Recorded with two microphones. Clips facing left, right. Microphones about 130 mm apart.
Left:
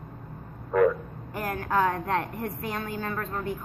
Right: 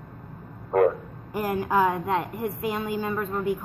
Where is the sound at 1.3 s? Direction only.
15° right (ahead or behind).